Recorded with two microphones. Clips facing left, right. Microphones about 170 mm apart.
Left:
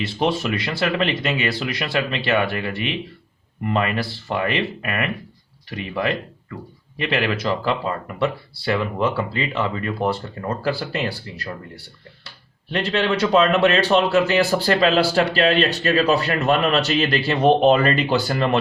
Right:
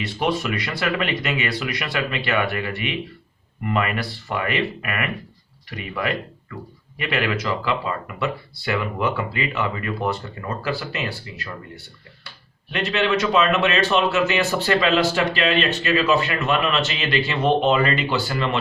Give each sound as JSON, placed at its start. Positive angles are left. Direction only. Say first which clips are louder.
{"t": 0.0, "sound": "speech", "louder": "left 2 dB", "side_deg": 30}
{"t": 12.7, "sound": "speech", "louder": "left 1 dB", "side_deg": 30}